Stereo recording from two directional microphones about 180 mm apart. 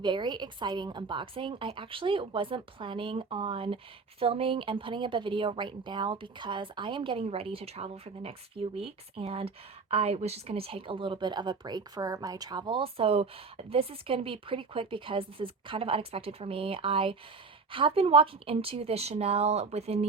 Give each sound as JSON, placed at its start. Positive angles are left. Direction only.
{"t": 0.0, "sound": "a woman's voice", "side_deg": -25}